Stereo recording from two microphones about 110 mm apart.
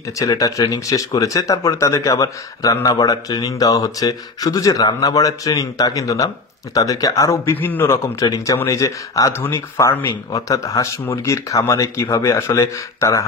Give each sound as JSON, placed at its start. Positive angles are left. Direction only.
{"t": 0.2, "sound": "speech", "side_deg": 35}
{"t": 7.5, "sound": "speech", "side_deg": 20}